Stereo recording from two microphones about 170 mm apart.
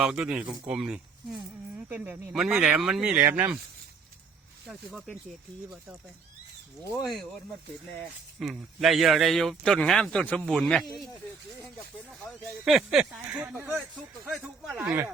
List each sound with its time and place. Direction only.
0.0 s speech: 5° right (ahead or behind)
4.6 s speech: centre (ahead or behind)
7.0 s speech: centre (ahead or behind)
8.4 s speech: centre (ahead or behind)
12.2 s speech: centre (ahead or behind)
13.7 s speech: centre (ahead or behind)
14.8 s speech: 15° right (ahead or behind)